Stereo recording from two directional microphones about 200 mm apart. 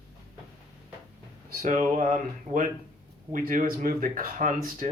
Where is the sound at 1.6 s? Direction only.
40° right (ahead or behind).